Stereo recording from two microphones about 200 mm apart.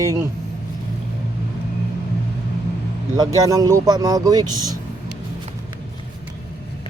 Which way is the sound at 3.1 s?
20° right (ahead or behind).